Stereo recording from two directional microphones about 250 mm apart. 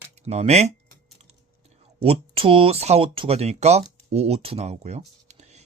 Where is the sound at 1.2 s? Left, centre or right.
Right.